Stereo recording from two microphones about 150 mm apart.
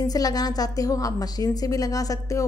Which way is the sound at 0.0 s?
25° left (ahead or behind).